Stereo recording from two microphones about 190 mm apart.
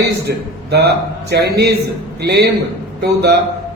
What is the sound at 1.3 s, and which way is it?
A man's voice, 60° right (ahead or behind).